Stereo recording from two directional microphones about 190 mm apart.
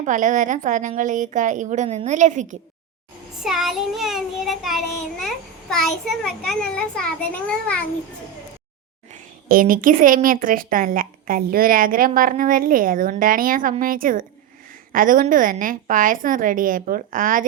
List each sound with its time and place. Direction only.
0.0 s a woman's voice: 40° right (ahead or behind)
3.4 s child singing: centre (ahead or behind)
9.1 s a woman's voice: 45° right (ahead or behind)